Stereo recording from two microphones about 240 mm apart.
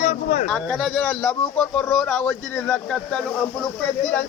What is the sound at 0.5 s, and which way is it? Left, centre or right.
Speech, centre.